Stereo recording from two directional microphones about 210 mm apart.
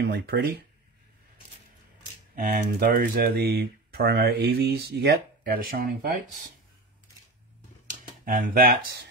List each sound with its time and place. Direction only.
0.0 s speech: 50° right (ahead or behind)
2.3 s speech: 45° right (ahead or behind)
7.8 s a sound: 40° right (ahead or behind)